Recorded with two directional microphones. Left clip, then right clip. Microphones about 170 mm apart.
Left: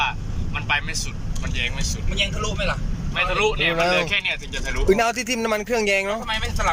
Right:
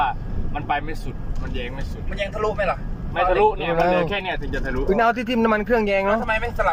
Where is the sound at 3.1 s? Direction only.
45° right (ahead or behind).